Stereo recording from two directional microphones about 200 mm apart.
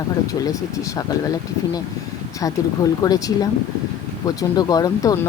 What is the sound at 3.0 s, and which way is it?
Speech, 20° left (ahead or behind).